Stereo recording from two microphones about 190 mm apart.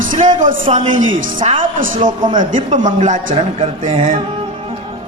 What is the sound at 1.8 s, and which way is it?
A man's voice, 45° right (ahead or behind).